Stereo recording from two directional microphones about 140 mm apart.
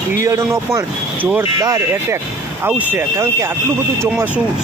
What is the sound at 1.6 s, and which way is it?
Speech, 25° right (ahead or behind).